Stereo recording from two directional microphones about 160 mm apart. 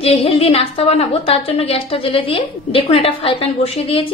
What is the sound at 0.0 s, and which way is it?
A woman's voice, 35° left (ahead or behind).